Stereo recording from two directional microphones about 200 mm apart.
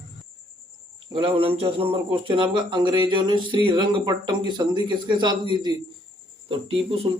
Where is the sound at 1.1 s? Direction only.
25° right (ahead or behind).